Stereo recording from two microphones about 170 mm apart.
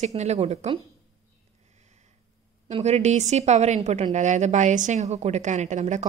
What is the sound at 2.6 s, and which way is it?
A woman's voice, 40° right (ahead or behind).